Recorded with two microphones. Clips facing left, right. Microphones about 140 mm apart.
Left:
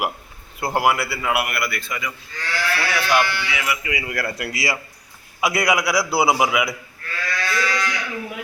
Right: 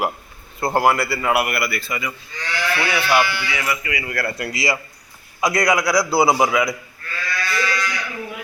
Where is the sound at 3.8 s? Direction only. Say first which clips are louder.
Right 1 dB; 15° left (ahead or behind).